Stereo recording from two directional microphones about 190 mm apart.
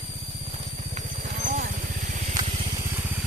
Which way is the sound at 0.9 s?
40° right (ahead or behind).